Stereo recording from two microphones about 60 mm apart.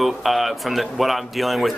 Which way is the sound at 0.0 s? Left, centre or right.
Centre.